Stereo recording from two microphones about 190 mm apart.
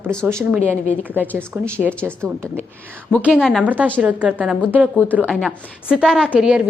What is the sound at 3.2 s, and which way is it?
A woman's voice, centre (ahead or behind).